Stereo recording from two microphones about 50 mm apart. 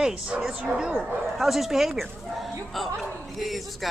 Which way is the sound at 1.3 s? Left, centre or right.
Centre.